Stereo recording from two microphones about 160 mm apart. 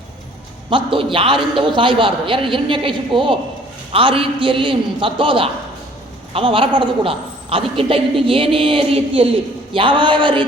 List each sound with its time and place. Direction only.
0.7 s a woman's voice: 35° right (ahead or behind)